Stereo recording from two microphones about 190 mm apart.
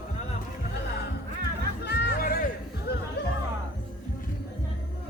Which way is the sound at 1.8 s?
60° left (ahead or behind).